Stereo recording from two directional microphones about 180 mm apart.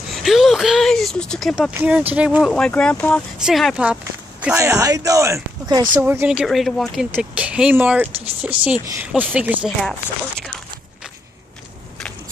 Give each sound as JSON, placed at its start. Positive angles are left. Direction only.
{"t": 0.1, "sound": "speech", "side_deg": 0}
{"t": 2.5, "sound": "speech", "side_deg": 5}
{"t": 6.0, "sound": "speech", "side_deg": -10}